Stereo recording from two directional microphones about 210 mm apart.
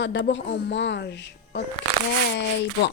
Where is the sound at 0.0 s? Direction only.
60° left (ahead or behind).